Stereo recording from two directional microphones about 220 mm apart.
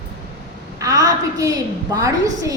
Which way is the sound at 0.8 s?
15° right (ahead or behind).